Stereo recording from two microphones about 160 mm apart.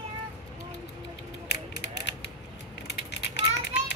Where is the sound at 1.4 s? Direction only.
90° left.